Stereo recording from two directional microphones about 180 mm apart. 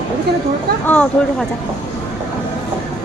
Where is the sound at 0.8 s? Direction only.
5° left (ahead or behind).